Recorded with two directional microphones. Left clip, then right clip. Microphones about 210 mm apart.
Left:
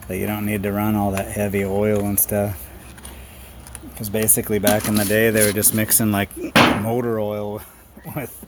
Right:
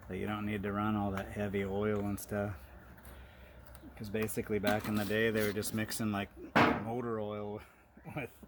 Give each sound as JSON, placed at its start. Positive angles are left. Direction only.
{"t": 0.1, "sound": "speech", "side_deg": 15}
{"t": 4.1, "sound": "speech", "side_deg": 15}